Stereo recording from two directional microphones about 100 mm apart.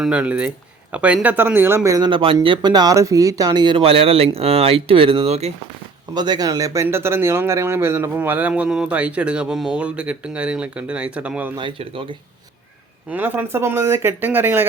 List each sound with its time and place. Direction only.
0.0 s speech: 10° right (ahead or behind); by 2.0 s 25° right (ahead or behind)
2.0 s speech: 55° right (ahead or behind)
2.6 s speech: 45° right (ahead or behind)
3.8 s speech: 70° right (ahead or behind); by 5.5 s 90° right
6.1 s speech: 45° right (ahead or behind)
6.8 s speech: 25° right (ahead or behind)
11.8 s speech: 65° right (ahead or behind)
13.1 s speech: 20° right (ahead or behind)